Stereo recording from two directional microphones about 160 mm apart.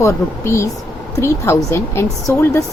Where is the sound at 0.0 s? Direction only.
20° left (ahead or behind).